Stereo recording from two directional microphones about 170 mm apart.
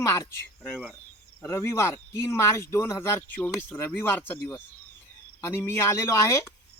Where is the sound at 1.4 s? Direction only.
15° left (ahead or behind).